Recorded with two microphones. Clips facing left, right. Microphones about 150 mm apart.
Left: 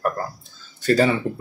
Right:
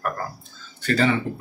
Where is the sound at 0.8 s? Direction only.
40° left (ahead or behind).